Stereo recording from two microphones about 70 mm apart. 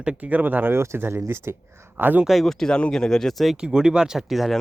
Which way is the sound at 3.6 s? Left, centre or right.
Centre.